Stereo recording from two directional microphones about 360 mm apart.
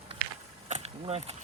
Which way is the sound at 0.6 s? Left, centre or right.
Centre.